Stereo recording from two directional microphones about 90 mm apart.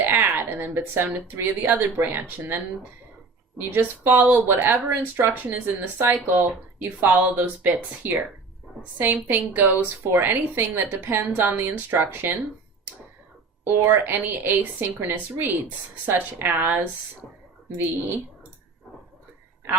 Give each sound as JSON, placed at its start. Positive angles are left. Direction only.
{"t": 0.0, "sound": "a woman's voice", "side_deg": -25}
{"t": 3.6, "sound": "a woman's voice", "side_deg": -25}
{"t": 9.3, "sound": "a woman's voice", "side_deg": -20}
{"t": 13.7, "sound": "a woman's voice", "side_deg": -25}